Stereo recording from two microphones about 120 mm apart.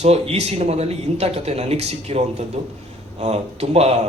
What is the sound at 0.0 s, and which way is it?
Speech, 60° right (ahead or behind).